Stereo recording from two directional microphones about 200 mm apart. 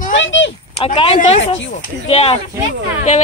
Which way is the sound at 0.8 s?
25° left (ahead or behind).